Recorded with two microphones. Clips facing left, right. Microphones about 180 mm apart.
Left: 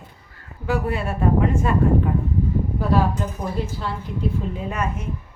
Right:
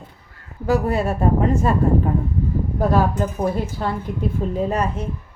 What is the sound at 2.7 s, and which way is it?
A woman's voice, 45° right (ahead or behind).